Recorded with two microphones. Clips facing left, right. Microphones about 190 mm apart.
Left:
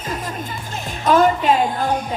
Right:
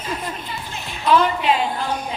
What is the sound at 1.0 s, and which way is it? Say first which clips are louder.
Speech: left 3 dB; 45° left (ahead or behind).